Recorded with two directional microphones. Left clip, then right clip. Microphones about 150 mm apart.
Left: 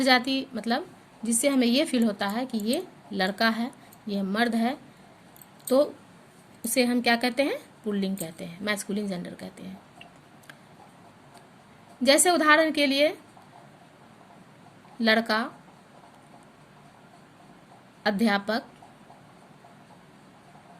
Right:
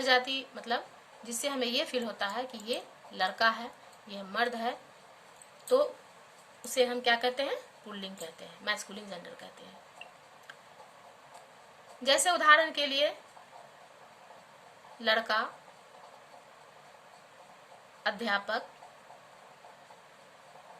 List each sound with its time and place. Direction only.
0.0 s speech: 55° left (ahead or behind)
12.0 s speech: 55° left (ahead or behind)
15.0 s speech: 55° left (ahead or behind)
18.0 s speech: 55° left (ahead or behind)